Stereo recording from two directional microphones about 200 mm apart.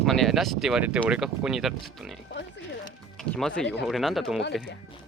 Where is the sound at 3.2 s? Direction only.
5° left (ahead or behind).